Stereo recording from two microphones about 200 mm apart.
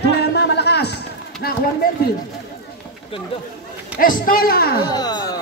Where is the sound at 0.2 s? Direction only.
55° left (ahead or behind).